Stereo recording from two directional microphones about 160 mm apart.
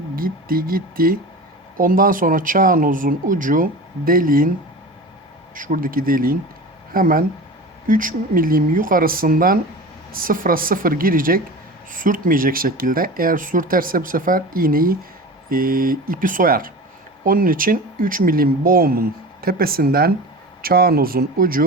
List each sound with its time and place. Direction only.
0.2 s speech: 65° right (ahead or behind)
5.5 s speech: 55° right (ahead or behind)